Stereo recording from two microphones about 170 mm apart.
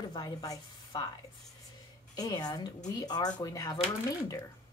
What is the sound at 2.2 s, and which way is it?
Speech, 25° left (ahead or behind).